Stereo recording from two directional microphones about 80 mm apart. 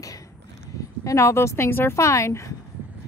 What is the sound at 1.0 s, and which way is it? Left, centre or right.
Speech, left.